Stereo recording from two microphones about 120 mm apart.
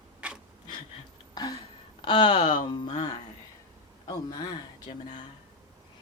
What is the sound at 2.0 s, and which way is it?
Speech, 40° left (ahead or behind).